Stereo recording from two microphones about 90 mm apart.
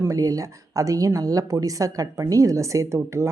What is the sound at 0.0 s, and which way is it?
Speech, 40° right (ahead or behind).